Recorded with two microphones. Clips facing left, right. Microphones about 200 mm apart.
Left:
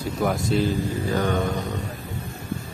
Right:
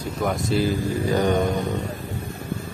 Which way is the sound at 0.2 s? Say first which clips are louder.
Even; centre (ahead or behind).